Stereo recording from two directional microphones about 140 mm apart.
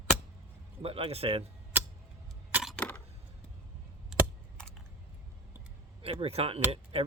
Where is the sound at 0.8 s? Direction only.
45° right (ahead or behind).